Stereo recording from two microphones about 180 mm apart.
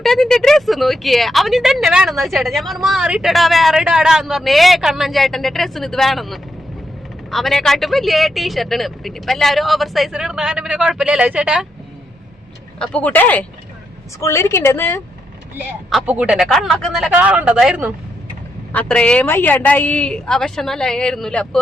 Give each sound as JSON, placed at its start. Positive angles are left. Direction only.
{"t": 0.0, "sound": "speech", "side_deg": 0}
{"t": 12.8, "sound": "speech", "side_deg": 5}
{"t": 15.9, "sound": "speech", "side_deg": -5}
{"t": 18.7, "sound": "speech", "side_deg": 5}